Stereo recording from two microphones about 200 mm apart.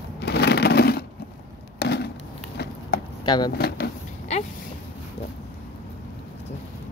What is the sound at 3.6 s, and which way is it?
Drawer open or close, 55° left (ahead or behind).